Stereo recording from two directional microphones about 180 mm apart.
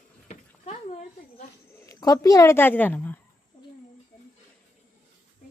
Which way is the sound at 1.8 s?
20° left (ahead or behind).